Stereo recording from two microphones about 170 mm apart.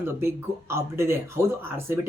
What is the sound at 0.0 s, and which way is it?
Speech, 15° right (ahead or behind).